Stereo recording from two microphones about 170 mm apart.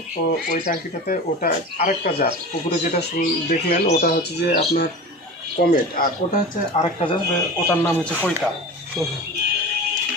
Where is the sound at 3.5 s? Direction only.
60° left (ahead or behind).